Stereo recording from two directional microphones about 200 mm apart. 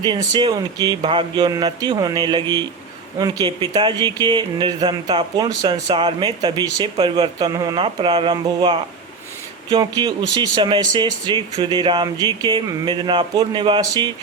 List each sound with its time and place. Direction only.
0.0 s speech: 20° right (ahead or behind)